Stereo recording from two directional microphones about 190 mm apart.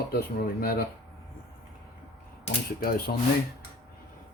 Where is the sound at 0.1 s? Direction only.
55° left (ahead or behind).